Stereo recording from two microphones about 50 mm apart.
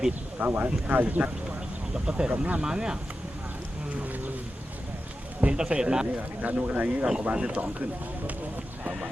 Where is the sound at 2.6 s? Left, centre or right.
Centre.